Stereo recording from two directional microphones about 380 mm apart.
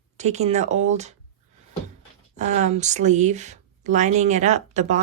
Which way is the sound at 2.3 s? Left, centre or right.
Centre.